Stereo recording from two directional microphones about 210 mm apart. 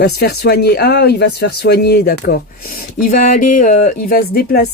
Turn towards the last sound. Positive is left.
turn(degrees=45)  # may be behind; listen again after turning